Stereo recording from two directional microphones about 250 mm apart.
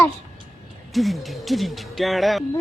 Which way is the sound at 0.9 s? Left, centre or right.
Centre.